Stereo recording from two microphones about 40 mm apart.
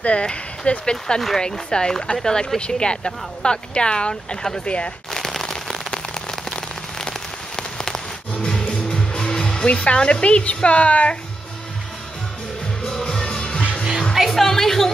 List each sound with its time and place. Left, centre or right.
0.0 s a woman's voice: left
4.6 s speech: left
5.1 s a sound: centre
5.9 s rain on surface: centre
8.5 s music: centre
12.8 s music: centre
14.3 s a woman's voice: centre